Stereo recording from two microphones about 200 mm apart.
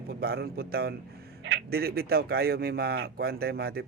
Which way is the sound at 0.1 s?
50° right (ahead or behind).